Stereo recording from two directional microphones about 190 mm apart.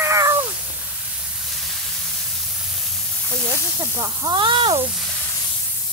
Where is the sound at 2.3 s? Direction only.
Centre (ahead or behind).